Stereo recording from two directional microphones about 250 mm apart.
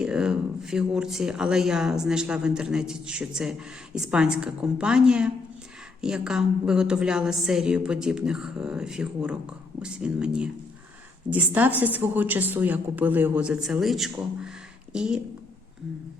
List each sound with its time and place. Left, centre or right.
0.0 s a woman's voice: centre